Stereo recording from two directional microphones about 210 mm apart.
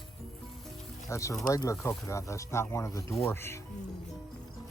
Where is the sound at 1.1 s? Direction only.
15° left (ahead or behind).